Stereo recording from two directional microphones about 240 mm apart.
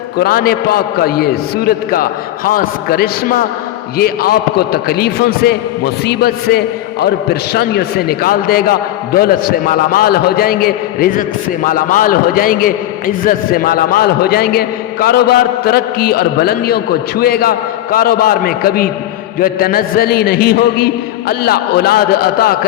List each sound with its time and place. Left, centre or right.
0.2 s a man's voice: left